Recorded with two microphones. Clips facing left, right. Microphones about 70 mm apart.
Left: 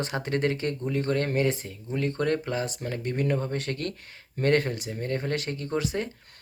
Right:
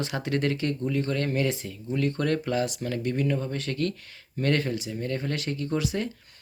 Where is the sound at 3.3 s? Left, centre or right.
Left.